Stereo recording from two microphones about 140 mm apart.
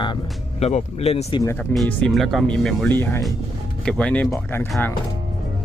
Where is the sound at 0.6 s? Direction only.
50° left (ahead or behind).